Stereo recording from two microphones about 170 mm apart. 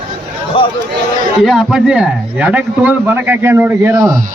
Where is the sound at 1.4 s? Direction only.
5° right (ahead or behind).